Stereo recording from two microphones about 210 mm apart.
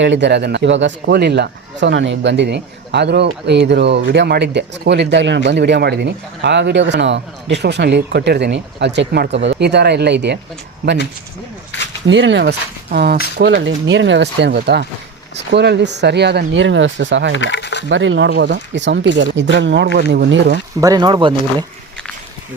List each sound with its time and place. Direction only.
0.0 s a man's voice: 60° right (ahead or behind)
12.0 s a man's voice: 60° right (ahead or behind)
17.3 s speech: 60° left (ahead or behind)
17.8 s a man's voice: 65° right (ahead or behind)
20.8 s speech: 20° right (ahead or behind)